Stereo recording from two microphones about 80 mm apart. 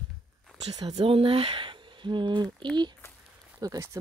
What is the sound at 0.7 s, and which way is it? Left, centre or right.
Speech, right.